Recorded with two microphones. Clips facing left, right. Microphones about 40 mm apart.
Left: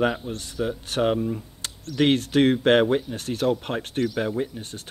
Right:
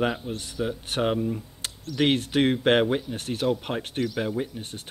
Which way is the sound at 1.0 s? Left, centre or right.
Centre.